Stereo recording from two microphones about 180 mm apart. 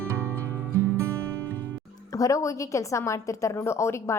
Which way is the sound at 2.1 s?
15° left (ahead or behind).